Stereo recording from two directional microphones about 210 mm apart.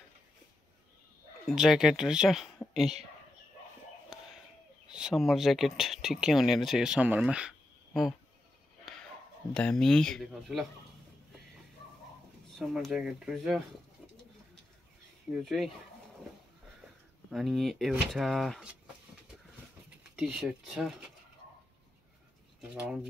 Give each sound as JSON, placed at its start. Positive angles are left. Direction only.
{"t": 1.4, "sound": "speech", "side_deg": 0}
{"t": 4.8, "sound": "speech", "side_deg": -5}
{"t": 9.5, "sound": "speech", "side_deg": 5}
{"t": 12.5, "sound": "speech", "side_deg": 0}
{"t": 15.3, "sound": "speech", "side_deg": 0}
{"t": 17.3, "sound": "speech", "side_deg": 0}
{"t": 20.0, "sound": "speech", "side_deg": -5}
{"t": 22.6, "sound": "speech", "side_deg": -5}